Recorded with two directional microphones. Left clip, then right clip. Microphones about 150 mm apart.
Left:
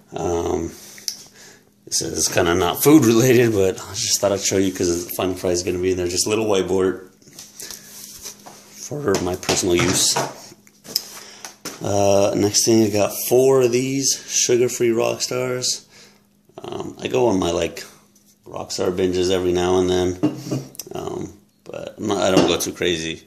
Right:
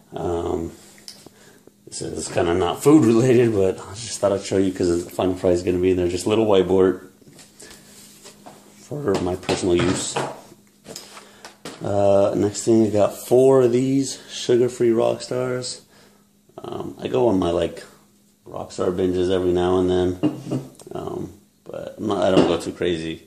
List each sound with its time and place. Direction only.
0.1 s a sound: 20° left (ahead or behind)
1.9 s speech: 20° left (ahead or behind); by 4.7 s 5° left (ahead or behind)
5.0 s speech: 25° right (ahead or behind)
5.5 s speech: 40° right (ahead or behind)
7.6 s a sound: 5° left (ahead or behind)
8.8 s speech: 15° left (ahead or behind)
9.2 s speech: 5° left (ahead or behind)
11.8 s speech: 15° left (ahead or behind)
12.9 s speech: 15° right (ahead or behind); by 20.2 s centre (ahead or behind)
20.7 s a sound: centre (ahead or behind)
21.6 s speech: 5° left (ahead or behind)